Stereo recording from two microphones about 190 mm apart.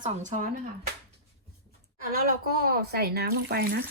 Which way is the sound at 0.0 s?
40° right (ahead or behind).